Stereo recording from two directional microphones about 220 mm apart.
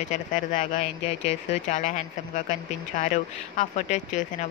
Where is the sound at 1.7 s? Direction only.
35° left (ahead or behind).